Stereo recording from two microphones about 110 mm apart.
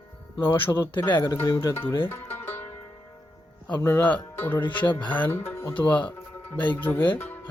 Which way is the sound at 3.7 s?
20° left (ahead or behind).